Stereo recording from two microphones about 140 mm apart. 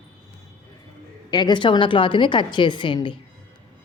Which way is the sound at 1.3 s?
30° left (ahead or behind).